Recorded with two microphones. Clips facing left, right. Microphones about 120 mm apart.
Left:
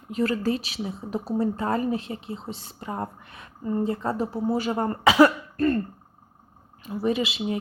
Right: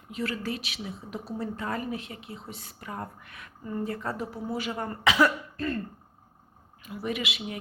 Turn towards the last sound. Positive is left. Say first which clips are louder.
# left 7 dB
turn(degrees=30)  # may be behind; listen again after turning